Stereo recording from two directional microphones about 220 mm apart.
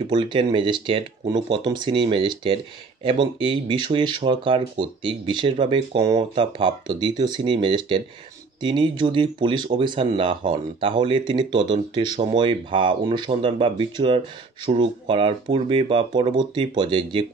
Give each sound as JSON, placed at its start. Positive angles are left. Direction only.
{"t": 0.1, "sound": "speech", "side_deg": -20}